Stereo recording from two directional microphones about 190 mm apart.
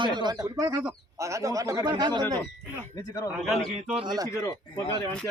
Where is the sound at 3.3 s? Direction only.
Centre (ahead or behind).